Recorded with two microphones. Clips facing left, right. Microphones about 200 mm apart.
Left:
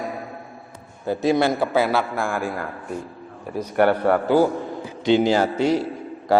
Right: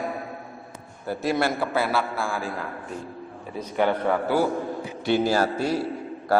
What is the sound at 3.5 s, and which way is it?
Speech, 10° left (ahead or behind).